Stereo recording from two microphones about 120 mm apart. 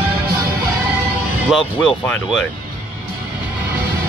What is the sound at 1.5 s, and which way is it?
Speech, 10° left (ahead or behind).